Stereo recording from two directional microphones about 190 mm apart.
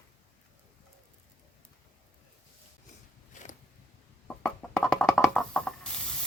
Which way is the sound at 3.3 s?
40° left (ahead or behind).